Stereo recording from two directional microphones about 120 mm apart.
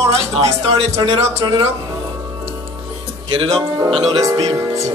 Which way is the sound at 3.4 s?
25° right (ahead or behind).